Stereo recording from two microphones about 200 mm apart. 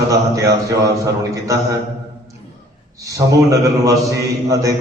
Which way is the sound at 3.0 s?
15° right (ahead or behind).